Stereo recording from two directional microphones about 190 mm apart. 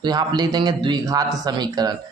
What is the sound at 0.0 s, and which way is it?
A man's voice, 20° right (ahead or behind).